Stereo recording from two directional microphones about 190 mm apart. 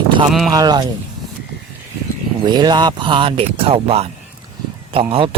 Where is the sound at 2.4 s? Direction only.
20° right (ahead or behind).